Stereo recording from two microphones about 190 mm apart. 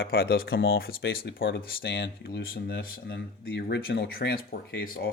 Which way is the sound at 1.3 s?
75° left (ahead or behind).